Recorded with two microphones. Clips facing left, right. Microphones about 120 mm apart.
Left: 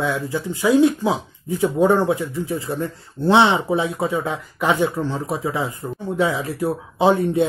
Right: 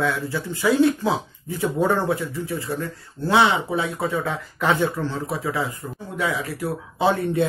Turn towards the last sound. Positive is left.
turn(degrees=20)  # may be behind; listen again after turning